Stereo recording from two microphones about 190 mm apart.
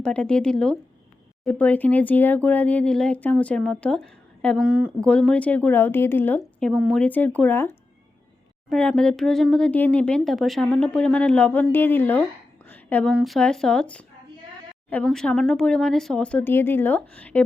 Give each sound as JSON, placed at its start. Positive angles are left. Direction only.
{"t": 0.0, "sound": "a woman's voice", "side_deg": 5}
{"t": 8.7, "sound": "speech", "side_deg": 5}
{"t": 12.6, "sound": "a sound", "side_deg": 10}
{"t": 13.1, "sound": "a woman's voice", "side_deg": 0}